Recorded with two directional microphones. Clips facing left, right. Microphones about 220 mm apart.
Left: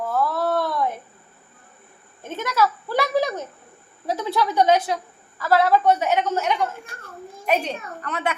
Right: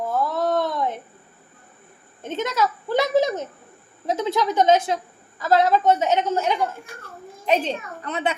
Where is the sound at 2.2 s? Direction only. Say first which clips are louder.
Left 1 dB; 20° right (ahead or behind).